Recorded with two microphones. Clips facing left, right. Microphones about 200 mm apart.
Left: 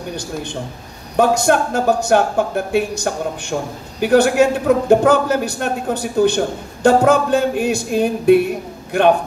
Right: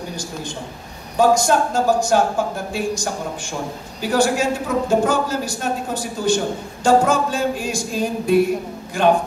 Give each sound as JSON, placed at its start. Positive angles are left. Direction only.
{"t": 0.1, "sound": "a man's voice", "side_deg": 65}